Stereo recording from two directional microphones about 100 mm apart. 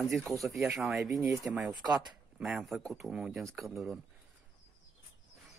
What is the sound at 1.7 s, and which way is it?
Speech, 45° right (ahead or behind).